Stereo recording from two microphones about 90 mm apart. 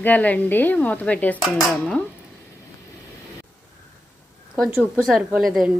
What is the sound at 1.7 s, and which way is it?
Speech, 5° left (ahead or behind).